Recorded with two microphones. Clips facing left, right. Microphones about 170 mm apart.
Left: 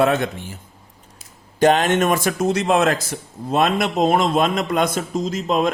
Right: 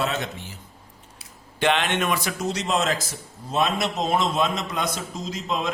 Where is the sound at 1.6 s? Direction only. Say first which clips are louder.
Left 7 dB; 40° left (ahead or behind).